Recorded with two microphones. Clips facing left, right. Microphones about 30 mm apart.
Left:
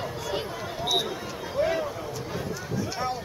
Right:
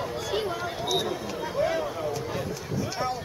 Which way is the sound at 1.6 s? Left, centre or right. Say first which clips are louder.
Left 1 dB; centre.